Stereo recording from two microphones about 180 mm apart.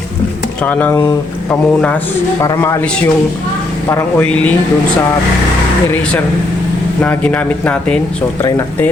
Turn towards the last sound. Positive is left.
turn(degrees=5)  # may be behind; listen again after turning